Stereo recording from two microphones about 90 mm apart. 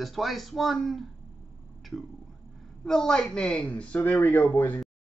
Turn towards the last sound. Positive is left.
turn(degrees=20)  # may be behind; listen again after turning